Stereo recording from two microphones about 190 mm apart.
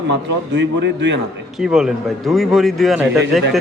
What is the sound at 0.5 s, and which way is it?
Speech, 65° right (ahead or behind).